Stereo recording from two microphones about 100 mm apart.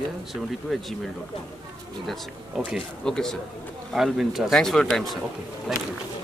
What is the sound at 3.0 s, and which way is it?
Speech, 5° left (ahead or behind).